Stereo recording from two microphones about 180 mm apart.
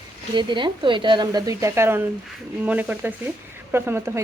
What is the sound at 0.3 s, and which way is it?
A woman's voice, 25° right (ahead or behind).